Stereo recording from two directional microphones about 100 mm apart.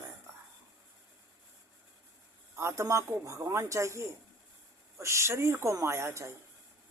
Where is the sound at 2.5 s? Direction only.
30° right (ahead or behind).